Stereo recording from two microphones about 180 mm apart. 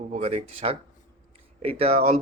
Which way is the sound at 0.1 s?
40° right (ahead or behind).